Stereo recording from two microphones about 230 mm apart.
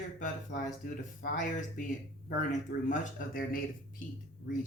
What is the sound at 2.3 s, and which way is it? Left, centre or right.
Speech, left.